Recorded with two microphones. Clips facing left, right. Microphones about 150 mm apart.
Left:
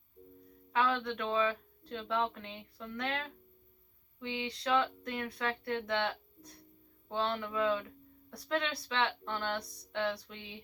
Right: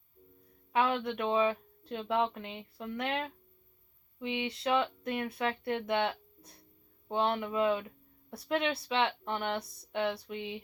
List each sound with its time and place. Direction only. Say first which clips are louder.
0.7 s speech: right 2 dB; 25° right (ahead or behind)